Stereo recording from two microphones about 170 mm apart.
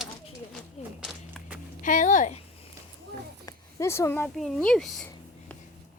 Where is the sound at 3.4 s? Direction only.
15° left (ahead or behind).